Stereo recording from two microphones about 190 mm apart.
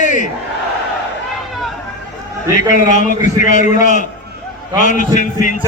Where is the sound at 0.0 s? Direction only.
40° left (ahead or behind).